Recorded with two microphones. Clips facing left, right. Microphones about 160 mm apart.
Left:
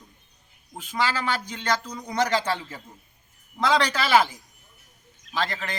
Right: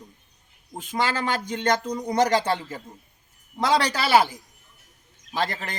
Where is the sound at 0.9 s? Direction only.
50° right (ahead or behind).